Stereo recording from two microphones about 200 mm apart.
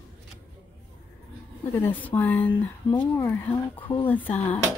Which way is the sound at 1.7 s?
10° left (ahead or behind).